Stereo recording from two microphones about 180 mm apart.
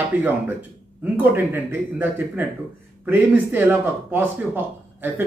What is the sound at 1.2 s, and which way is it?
A man's voice, 10° right (ahead or behind).